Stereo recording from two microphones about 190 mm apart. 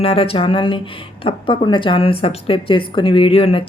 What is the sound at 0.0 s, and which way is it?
Speech, 30° left (ahead or behind).